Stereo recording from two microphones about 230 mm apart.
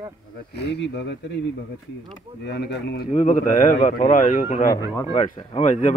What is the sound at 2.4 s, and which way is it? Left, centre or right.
A man's voice, left.